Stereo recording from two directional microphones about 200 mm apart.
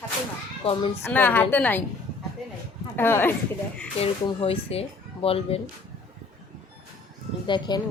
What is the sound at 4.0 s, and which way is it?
Speech, 30° left (ahead or behind).